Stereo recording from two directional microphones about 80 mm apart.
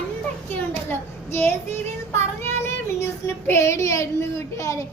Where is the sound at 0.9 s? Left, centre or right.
Left.